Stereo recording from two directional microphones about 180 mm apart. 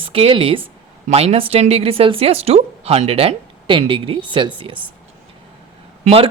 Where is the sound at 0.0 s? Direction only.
30° right (ahead or behind).